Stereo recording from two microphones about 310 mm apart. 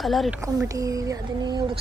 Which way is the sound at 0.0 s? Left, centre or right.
Centre.